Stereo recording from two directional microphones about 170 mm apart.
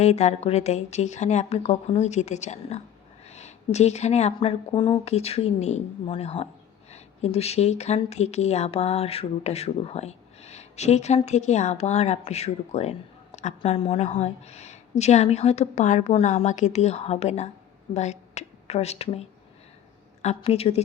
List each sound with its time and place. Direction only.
0.0 s a woman's voice: 40° left (ahead or behind)
20.2 s a woman's voice: 40° left (ahead or behind)